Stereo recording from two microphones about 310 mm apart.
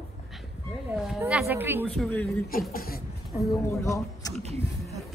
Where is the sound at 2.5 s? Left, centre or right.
Left.